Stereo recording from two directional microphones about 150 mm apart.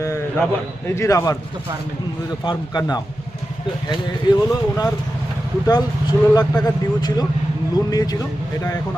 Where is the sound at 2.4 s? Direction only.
30° left (ahead or behind).